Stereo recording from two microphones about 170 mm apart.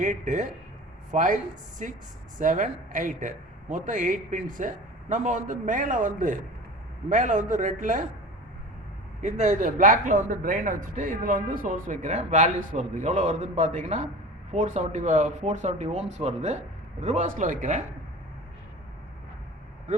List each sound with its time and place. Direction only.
0.0 s a man's voice: 45° right (ahead or behind)
9.2 s a man's voice: 45° right (ahead or behind)